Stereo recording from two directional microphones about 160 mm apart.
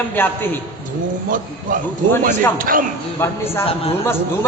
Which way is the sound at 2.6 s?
60° right (ahead or behind).